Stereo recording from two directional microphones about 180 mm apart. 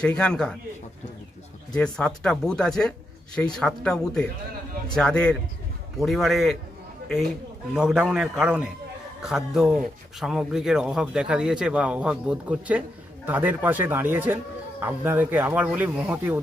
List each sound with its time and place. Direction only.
0.0 s speech: 5° left (ahead or behind)
1.7 s speech: 5° left (ahead or behind)
7.7 s speech: 5° right (ahead or behind)